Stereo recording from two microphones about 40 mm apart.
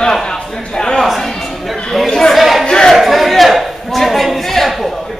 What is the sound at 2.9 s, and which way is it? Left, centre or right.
Speech, centre.